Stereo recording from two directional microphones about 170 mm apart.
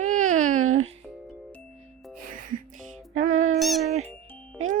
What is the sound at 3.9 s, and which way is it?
Music, 40° right (ahead or behind).